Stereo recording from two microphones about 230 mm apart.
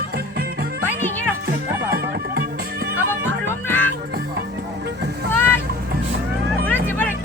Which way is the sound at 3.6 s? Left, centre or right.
Centre.